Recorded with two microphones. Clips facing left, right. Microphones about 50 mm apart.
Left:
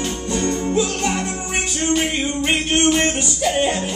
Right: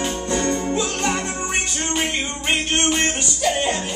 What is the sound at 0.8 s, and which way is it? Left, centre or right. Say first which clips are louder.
Music: left 2 dB; centre.